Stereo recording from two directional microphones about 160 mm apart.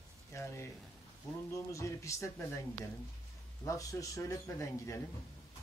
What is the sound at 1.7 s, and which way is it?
Speech, 20° left (ahead or behind).